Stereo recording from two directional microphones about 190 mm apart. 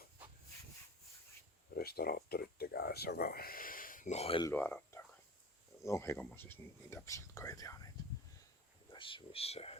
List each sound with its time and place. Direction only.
1.7 s speech: 55° left (ahead or behind); by 4.4 s 30° left (ahead or behind)
4.4 s speech: 10° left (ahead or behind)
8.9 s speech: 25° left (ahead or behind)